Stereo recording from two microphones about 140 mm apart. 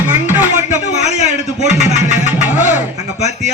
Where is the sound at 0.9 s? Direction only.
55° left (ahead or behind).